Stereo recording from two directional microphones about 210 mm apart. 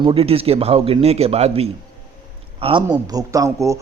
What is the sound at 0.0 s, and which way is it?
A man's voice, 25° right (ahead or behind).